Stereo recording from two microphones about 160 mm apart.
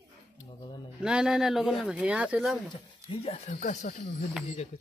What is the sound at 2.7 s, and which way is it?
Speech, 35° left (ahead or behind).